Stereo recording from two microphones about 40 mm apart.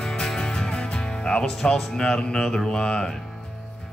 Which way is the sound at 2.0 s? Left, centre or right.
Centre.